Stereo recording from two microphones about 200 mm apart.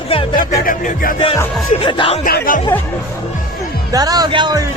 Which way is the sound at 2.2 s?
45° left (ahead or behind).